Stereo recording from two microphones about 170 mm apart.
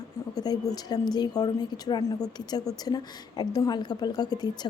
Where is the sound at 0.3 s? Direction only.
25° left (ahead or behind).